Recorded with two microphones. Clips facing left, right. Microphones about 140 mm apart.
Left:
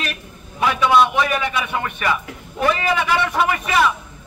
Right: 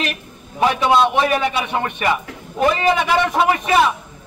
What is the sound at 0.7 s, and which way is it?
A man's voice, 40° right (ahead or behind).